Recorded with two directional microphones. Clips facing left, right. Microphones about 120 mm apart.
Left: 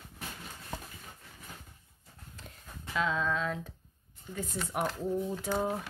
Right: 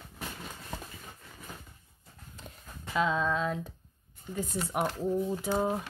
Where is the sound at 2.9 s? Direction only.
20° right (ahead or behind).